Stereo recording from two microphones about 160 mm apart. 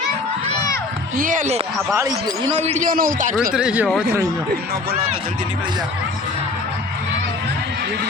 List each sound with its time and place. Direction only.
1.1 s a man's voice: 55° right (ahead or behind)
1.9 s speech: 20° right (ahead or behind)
2.5 s a man's voice: 40° right (ahead or behind)
3.3 s speech: 5° right (ahead or behind)